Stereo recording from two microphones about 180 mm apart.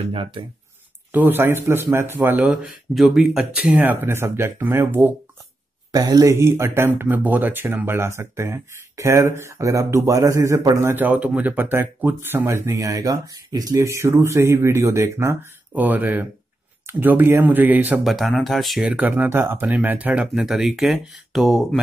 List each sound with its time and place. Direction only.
0.0 s speech: 30° right (ahead or behind)
1.1 s speech: 10° right (ahead or behind)